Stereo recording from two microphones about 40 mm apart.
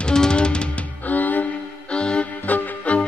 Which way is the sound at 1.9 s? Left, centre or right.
Left.